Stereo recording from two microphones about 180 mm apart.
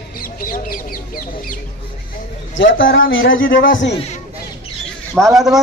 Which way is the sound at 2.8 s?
90° left.